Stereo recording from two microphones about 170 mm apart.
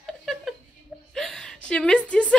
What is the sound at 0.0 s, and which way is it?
Chuckle, centre (ahead or behind).